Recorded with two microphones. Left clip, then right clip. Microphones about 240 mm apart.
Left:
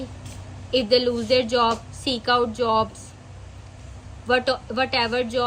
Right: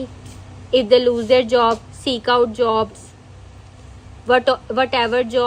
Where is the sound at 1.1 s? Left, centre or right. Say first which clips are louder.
Right 7 dB; right.